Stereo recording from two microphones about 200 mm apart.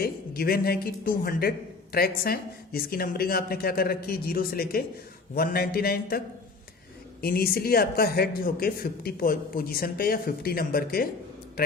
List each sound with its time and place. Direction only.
0.0 s speech: 50° left (ahead or behind)